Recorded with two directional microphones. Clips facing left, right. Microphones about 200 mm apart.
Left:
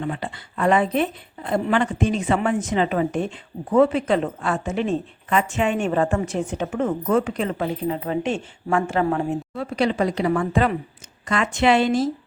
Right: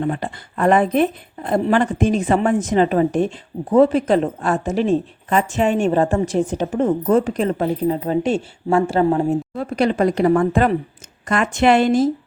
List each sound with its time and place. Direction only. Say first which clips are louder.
0.0 s a woman's voice: right 5 dB; 45° right (ahead or behind)
9.6 s speech: right 2 dB; 50° right (ahead or behind)